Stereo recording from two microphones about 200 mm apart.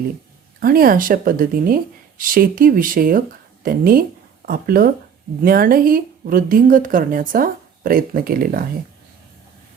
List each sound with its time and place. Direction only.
0.6 s speech: 45° right (ahead or behind)